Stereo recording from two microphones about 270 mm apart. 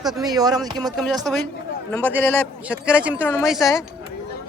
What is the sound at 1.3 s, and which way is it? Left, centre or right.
Speech, centre.